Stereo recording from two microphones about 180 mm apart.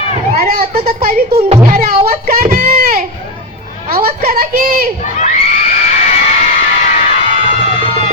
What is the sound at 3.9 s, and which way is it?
Speech, 55° right (ahead or behind).